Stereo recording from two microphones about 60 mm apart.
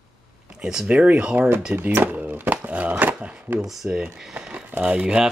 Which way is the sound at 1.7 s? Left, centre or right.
Right.